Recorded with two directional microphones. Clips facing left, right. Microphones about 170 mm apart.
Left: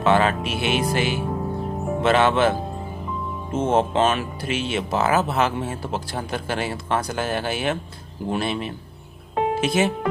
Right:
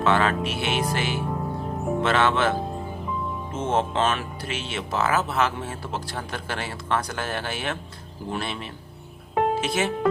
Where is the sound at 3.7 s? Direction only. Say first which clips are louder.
Left 3 dB; 15° left (ahead or behind).